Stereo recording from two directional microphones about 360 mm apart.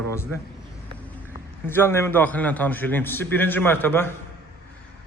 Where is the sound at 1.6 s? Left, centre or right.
Centre.